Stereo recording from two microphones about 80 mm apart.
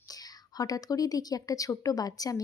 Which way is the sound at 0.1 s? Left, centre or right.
Left.